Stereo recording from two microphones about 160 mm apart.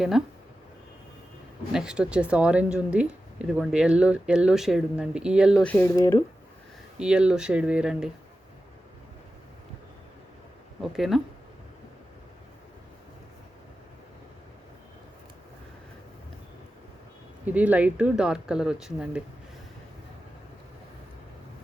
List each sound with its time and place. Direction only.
0.1 s speech: centre (ahead or behind)
1.7 s speech: 5° right (ahead or behind)
5.6 s speech: 10° left (ahead or behind)
7.0 s speech: 5° right (ahead or behind)
10.8 s speech: centre (ahead or behind)
17.4 s speech: 10° right (ahead or behind)